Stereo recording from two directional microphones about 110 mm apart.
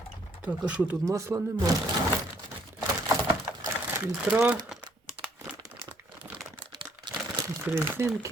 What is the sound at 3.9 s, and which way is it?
Speech, 20° right (ahead or behind).